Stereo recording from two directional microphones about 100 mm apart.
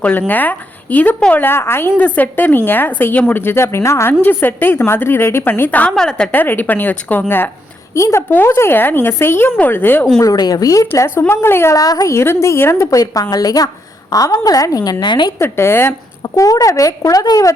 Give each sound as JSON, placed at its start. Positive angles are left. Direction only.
{"t": 0.0, "sound": "a woman's voice", "side_deg": 15}
{"t": 5.9, "sound": "a woman's voice", "side_deg": 5}
{"t": 6.3, "sound": "a woman's voice", "side_deg": 20}
{"t": 7.9, "sound": "a woman's voice", "side_deg": 30}
{"t": 10.2, "sound": "a woman's voice", "side_deg": 40}
{"t": 11.8, "sound": "a woman's voice", "side_deg": 40}
{"t": 15.4, "sound": "a woman's voice", "side_deg": 25}
{"t": 16.2, "sound": "a woman's voice", "side_deg": 35}